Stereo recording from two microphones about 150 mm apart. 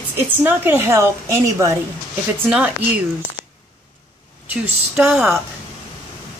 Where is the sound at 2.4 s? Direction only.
10° right (ahead or behind).